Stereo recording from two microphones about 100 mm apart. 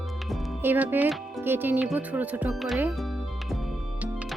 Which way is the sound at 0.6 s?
20° right (ahead or behind).